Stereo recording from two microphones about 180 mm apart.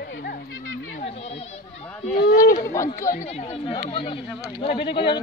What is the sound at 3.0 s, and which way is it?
Speech, 45° left (ahead or behind).